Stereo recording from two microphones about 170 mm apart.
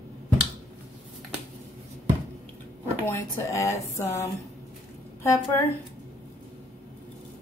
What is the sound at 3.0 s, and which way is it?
Speech, 15° left (ahead or behind).